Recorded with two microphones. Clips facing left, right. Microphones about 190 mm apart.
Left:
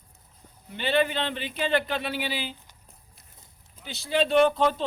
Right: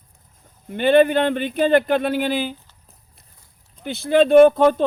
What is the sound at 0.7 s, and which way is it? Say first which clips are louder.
Speech: right 10 dB; 50° right (ahead or behind).